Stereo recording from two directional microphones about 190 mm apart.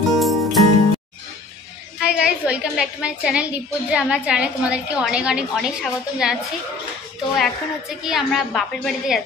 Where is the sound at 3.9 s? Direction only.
5° right (ahead or behind).